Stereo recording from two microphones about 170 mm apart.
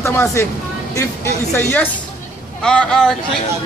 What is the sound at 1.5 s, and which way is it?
A man's voice, 10° left (ahead or behind).